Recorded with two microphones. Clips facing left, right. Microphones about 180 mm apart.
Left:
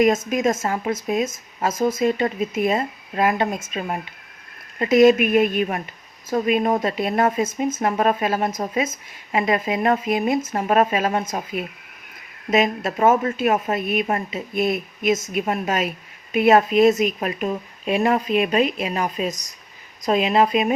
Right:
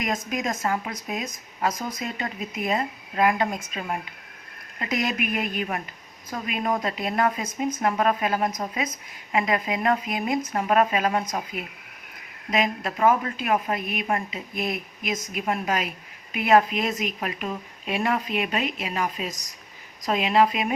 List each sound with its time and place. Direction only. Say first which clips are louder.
0.0 s speech: left 10 dB; 25° left (ahead or behind)